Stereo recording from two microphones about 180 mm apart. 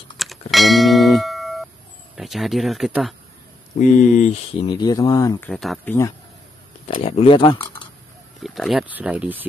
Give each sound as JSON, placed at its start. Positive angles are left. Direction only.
{"t": 0.2, "sound": "doorbell", "side_deg": 0}
{"t": 2.1, "sound": "speech", "side_deg": 0}
{"t": 3.7, "sound": "speech", "side_deg": 45}
{"t": 4.6, "sound": "speech", "side_deg": 20}
{"t": 5.4, "sound": "speech", "side_deg": 0}
{"t": 5.9, "sound": "speech", "side_deg": 15}
{"t": 7.1, "sound": "speech", "side_deg": 30}
{"t": 8.4, "sound": "speech", "side_deg": 0}